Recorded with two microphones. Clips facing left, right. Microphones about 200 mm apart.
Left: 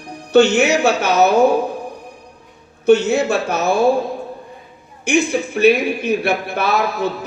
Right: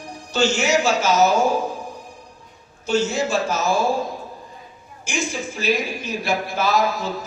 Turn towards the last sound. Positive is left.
turn(degrees=60)  # may be behind; listen again after turning